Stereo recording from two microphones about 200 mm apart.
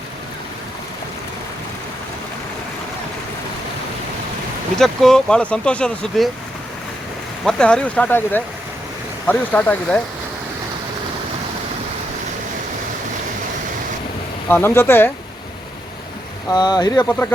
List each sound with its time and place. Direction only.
4.8 s speech: 5° left (ahead or behind)
7.4 s speech: 5° left (ahead or behind)
14.4 s speech: 10° left (ahead or behind)
16.5 s speech: 20° left (ahead or behind)